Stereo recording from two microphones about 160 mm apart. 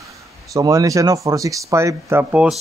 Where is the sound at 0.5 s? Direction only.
20° right (ahead or behind).